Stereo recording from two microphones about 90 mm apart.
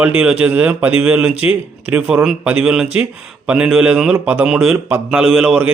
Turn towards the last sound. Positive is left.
turn(degrees=-10)  # may be behind; listen again after turning